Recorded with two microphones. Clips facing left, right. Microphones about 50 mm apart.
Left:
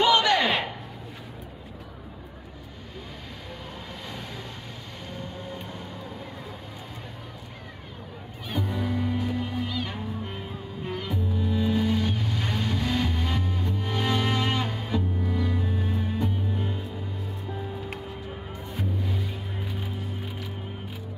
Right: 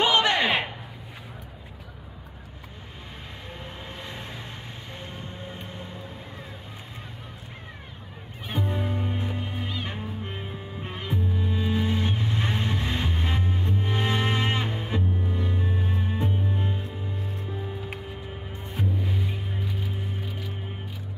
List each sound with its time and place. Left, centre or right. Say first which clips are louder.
0.0 s a sound: left 1 dB; right
4.0 s vehicle: even; right
5.5 s music: left 2 dB; right
8.5 s music: even; right